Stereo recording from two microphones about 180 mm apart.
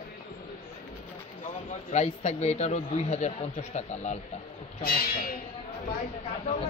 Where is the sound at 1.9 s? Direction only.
40° left (ahead or behind).